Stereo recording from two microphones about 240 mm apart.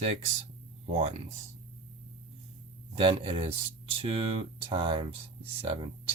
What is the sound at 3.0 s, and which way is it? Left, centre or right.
Speech, right.